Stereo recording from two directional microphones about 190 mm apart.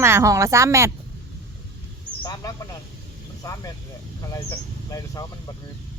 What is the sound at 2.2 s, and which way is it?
A man's voice, 20° left (ahead or behind).